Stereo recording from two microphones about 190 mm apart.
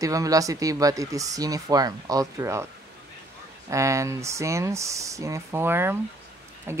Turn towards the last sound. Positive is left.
turn(degrees=-15)  # may be behind; listen again after turning